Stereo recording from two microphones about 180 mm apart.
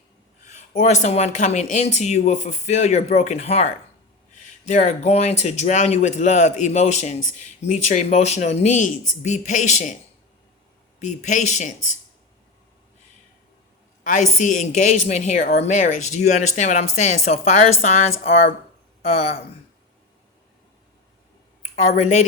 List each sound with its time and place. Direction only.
0.5 s speech: 40° left (ahead or behind)
11.0 s speech: 40° left (ahead or behind)
14.0 s speech: 45° left (ahead or behind)
19.0 s speech: 35° left (ahead or behind)
21.9 s speech: 40° left (ahead or behind)